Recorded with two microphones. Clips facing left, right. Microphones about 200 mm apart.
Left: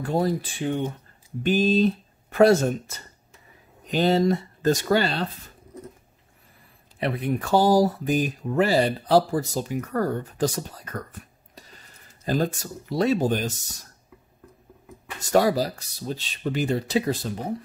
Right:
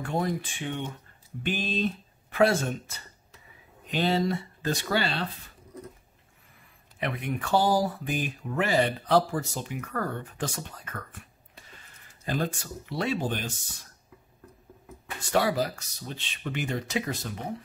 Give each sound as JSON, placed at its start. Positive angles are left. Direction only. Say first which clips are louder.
{"t": 0.0, "sound": "speech", "louder": "left 5 dB", "side_deg": 35}
{"t": 7.0, "sound": "speech", "louder": "left 6 dB", "side_deg": 35}
{"t": 15.1, "sound": "speech", "louder": "left 5 dB", "side_deg": 40}